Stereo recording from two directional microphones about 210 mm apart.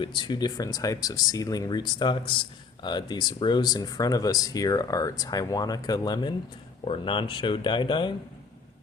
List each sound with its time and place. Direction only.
0.0 s speech: 20° left (ahead or behind)